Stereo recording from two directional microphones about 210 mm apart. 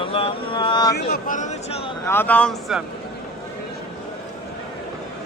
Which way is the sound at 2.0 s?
10° left (ahead or behind).